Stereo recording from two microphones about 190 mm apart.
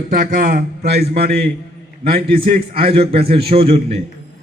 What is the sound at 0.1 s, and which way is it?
A man's voice, 40° right (ahead or behind).